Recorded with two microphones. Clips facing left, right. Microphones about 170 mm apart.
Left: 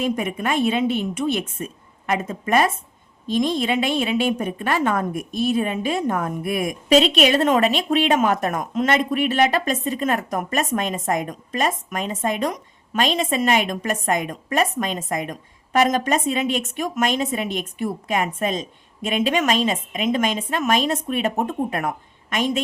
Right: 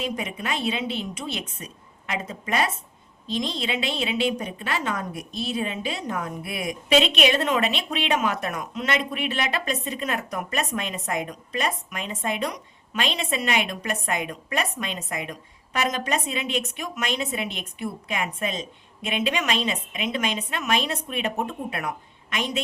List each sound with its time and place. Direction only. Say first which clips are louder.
0.0 s a woman's voice: left 6 dB; 50° left (ahead or behind)